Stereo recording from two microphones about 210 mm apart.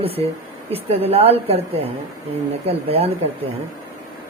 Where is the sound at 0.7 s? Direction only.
30° right (ahead or behind).